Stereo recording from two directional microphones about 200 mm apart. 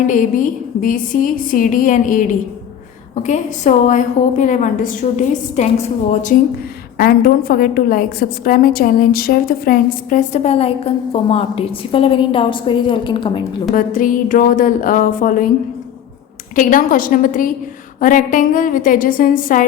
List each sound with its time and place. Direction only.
0.1 s a woman's voice: 40° left (ahead or behind); by 13.4 s 25° left (ahead or behind)
13.7 s a woman's voice: 40° left (ahead or behind)
16.6 s a woman's voice: 40° left (ahead or behind)